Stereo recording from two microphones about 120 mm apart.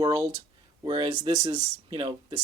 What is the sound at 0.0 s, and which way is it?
Speech, 30° right (ahead or behind).